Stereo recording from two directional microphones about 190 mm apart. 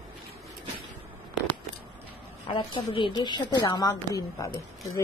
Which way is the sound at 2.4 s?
25° left (ahead or behind).